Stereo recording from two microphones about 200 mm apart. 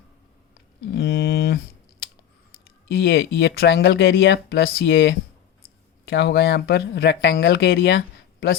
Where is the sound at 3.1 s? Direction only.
65° left (ahead or behind).